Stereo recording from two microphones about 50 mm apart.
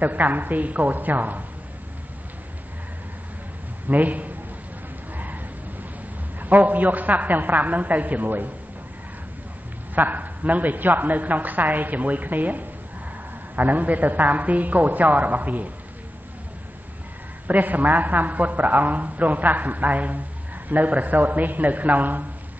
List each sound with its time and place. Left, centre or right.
0.0 s a man's voice: right
3.8 s a man's voice: right
5.1 s a sound: right
6.4 s a man's voice: right
9.9 s a man's voice: right
17.5 s a man's voice: right